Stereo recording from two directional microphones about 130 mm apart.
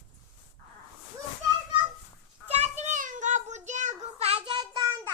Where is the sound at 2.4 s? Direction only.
55° right (ahead or behind).